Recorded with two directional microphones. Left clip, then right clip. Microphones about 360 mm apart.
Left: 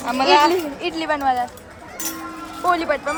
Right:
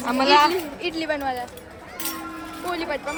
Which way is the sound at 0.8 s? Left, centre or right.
Left.